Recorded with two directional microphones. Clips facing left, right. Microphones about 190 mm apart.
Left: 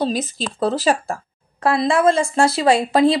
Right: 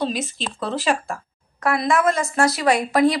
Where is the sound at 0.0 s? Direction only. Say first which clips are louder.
Left 3 dB; 40° left (ahead or behind).